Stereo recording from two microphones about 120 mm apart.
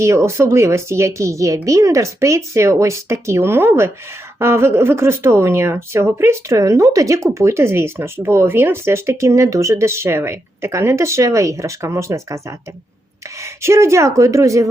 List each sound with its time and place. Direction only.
0.0 s speech: 25° right (ahead or behind)